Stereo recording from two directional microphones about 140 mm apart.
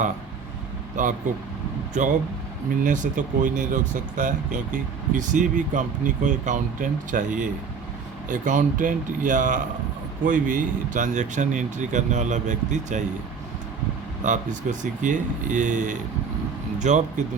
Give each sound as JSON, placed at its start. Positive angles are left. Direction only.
{"t": 1.0, "sound": "speech", "side_deg": -65}
{"t": 14.3, "sound": "speech", "side_deg": -65}